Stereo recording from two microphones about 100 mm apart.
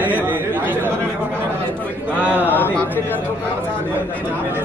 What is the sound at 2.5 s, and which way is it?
Speech, 20° left (ahead or behind).